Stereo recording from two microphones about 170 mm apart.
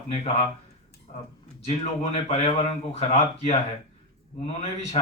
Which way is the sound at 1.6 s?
35° left (ahead or behind).